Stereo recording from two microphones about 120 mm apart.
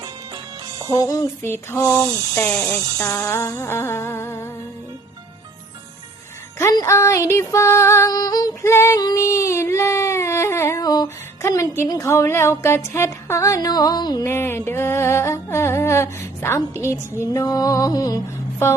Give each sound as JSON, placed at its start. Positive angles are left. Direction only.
{"t": 0.9, "sound": "music", "side_deg": 30}
{"t": 1.4, "sound": "humming", "side_deg": 20}
{"t": 6.6, "sound": "humming", "side_deg": 25}
{"t": 9.0, "sound": "a sound", "side_deg": 30}
{"t": 11.4, "sound": "music", "side_deg": 25}
{"t": 11.9, "sound": "humming", "side_deg": 25}
{"t": 14.3, "sound": "humming", "side_deg": 20}